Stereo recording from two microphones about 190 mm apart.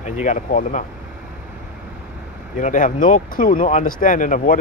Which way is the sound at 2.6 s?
40° left (ahead or behind).